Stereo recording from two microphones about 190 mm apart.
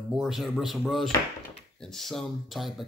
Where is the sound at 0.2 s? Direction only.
Centre (ahead or behind).